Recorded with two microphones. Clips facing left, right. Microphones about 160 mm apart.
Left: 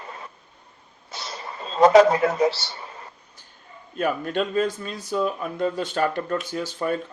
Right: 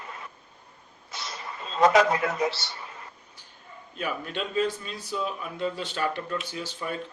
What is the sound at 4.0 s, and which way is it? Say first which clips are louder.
Speech: left 8 dB; 50° left (ahead or behind).